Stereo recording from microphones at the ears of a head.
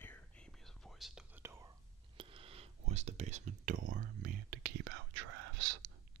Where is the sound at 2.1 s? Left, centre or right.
Right.